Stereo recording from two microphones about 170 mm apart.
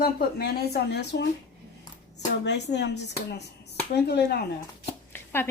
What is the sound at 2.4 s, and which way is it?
Speech, 90° left.